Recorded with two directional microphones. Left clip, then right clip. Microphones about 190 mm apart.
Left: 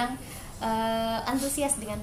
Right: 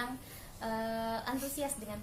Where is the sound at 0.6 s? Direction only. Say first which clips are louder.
Left 9 dB; 20° right (ahead or behind).